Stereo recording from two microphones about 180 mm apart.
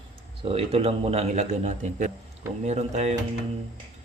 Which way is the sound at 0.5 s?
35° right (ahead or behind).